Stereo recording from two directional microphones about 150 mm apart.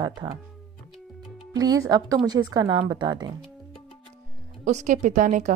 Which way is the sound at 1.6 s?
25° right (ahead or behind).